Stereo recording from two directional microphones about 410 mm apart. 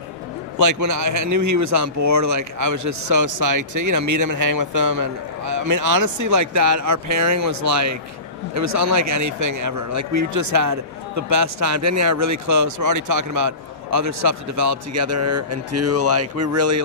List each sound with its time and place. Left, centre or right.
0.6 s speech: right